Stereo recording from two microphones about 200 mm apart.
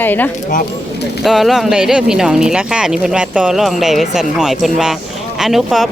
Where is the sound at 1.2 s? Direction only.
Centre (ahead or behind).